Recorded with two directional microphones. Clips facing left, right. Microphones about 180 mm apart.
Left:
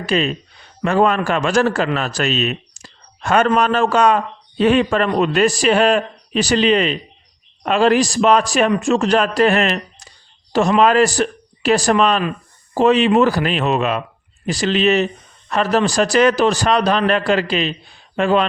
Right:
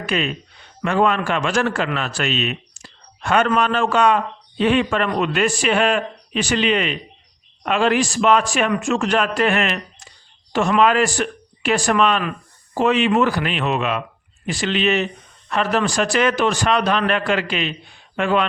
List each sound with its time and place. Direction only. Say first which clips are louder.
0.0 s a man's voice: left 4 dB; 35° left (ahead or behind)